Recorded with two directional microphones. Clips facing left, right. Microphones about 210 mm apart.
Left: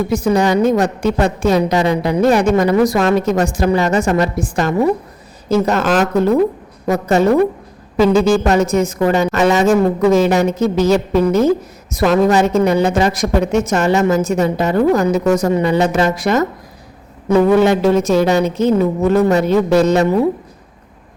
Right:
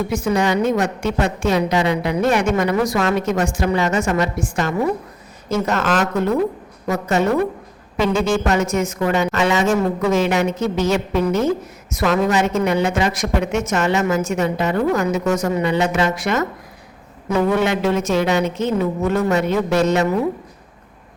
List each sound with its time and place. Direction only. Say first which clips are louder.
0.1 s a woman's voice: left 5 dB; 35° left (ahead or behind)